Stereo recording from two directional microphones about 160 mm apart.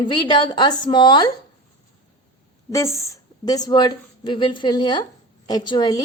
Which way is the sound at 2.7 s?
20° left (ahead or behind).